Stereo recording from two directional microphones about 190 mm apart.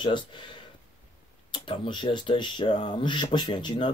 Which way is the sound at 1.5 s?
25° left (ahead or behind).